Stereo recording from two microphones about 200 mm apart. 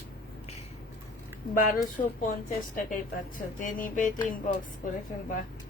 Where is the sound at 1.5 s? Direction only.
40° left (ahead or behind).